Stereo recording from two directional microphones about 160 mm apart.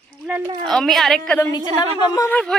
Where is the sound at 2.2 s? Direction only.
5° left (ahead or behind).